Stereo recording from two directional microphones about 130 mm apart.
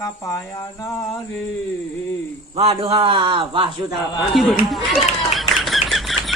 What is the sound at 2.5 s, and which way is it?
A man's voice, 50° right (ahead or behind).